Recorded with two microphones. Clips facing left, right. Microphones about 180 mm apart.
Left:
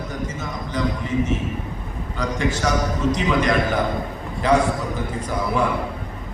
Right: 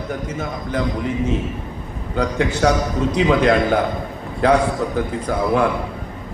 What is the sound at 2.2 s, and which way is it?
Speech, 60° right (ahead or behind).